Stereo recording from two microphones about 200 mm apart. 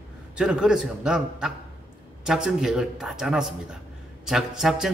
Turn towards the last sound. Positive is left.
turn(degrees=0)  # may be behind; listen again after turning